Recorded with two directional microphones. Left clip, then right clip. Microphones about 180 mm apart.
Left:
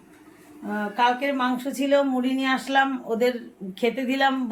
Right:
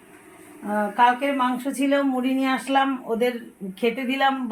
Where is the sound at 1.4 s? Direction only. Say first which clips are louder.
Right 2 dB; 10° right (ahead or behind).